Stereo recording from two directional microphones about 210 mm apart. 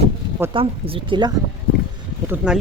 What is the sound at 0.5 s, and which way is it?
Speech, 25° right (ahead or behind).